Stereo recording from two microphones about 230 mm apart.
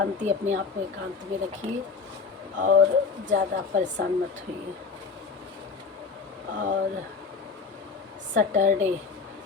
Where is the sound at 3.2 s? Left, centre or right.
Right.